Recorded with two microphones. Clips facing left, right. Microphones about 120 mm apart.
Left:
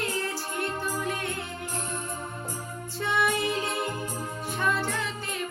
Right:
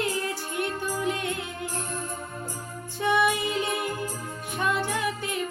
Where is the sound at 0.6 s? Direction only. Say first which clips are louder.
Right 3 dB; 15° right (ahead or behind).